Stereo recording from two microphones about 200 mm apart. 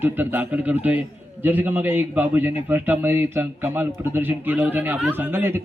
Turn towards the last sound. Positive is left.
turn(degrees=-10)  # may be behind; listen again after turning